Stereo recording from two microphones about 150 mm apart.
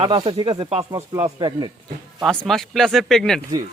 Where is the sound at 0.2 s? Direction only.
30° right (ahead or behind).